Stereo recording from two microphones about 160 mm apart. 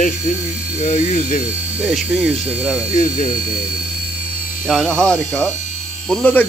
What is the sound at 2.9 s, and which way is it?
Speech, 60° left (ahead or behind).